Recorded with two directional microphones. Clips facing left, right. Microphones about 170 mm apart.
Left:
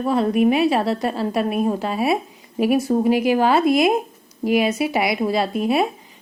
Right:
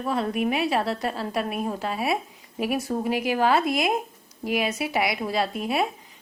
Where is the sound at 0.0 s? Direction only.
25° left (ahead or behind).